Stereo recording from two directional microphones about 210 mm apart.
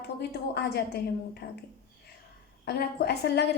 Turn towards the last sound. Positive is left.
turn(degrees=50)  # may be behind; listen again after turning